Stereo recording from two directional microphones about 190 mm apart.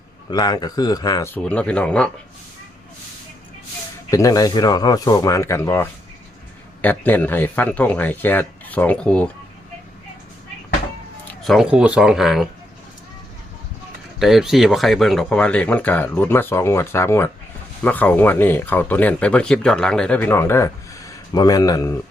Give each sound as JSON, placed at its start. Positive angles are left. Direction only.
{"t": 0.3, "sound": "speech", "side_deg": 20}
{"t": 4.1, "sound": "speech", "side_deg": 15}
{"t": 11.4, "sound": "speech", "side_deg": 0}
{"t": 14.2, "sound": "speech", "side_deg": 0}